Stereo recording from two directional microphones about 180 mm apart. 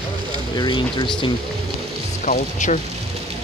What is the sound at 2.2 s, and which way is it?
Speech, 45° left (ahead or behind).